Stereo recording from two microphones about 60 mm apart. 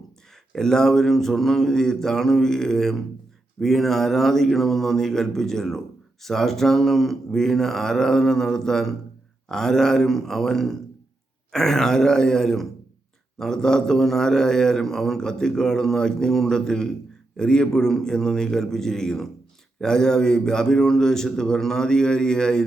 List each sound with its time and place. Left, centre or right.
0.5 s a man's voice: centre